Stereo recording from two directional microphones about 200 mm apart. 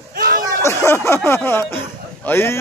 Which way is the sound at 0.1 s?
45° right (ahead or behind).